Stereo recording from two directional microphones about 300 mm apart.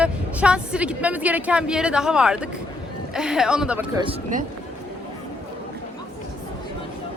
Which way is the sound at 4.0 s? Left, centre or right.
Centre.